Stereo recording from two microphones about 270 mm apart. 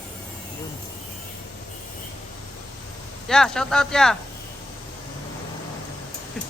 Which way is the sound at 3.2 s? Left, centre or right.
Centre.